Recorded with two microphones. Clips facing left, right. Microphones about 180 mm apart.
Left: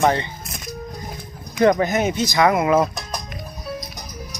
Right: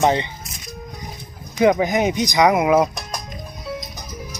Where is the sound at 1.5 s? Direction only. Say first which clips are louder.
Even; 5° right (ahead or behind).